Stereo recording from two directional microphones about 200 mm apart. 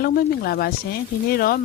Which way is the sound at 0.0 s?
50° left (ahead or behind).